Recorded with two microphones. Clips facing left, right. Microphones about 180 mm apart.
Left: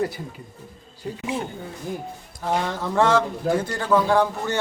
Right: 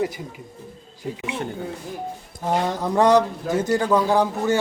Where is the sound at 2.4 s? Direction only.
15° right (ahead or behind).